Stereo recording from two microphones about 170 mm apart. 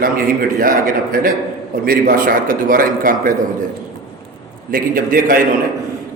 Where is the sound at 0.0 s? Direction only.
55° right (ahead or behind).